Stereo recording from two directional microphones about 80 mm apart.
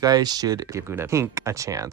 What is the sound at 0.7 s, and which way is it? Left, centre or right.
Speech, right.